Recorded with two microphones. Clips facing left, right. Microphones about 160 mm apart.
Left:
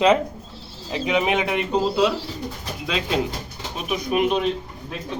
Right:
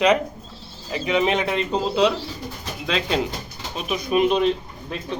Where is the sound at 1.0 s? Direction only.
15° left (ahead or behind).